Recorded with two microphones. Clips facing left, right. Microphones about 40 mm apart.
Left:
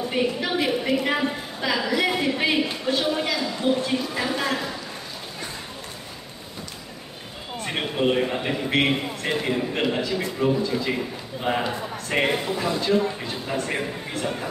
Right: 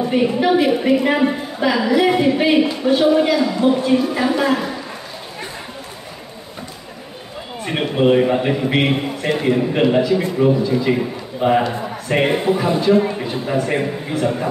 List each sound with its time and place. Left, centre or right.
0.1 s a man's voice: centre
7.6 s a man's voice: centre
12.4 s speech: right
12.8 s a man's voice: centre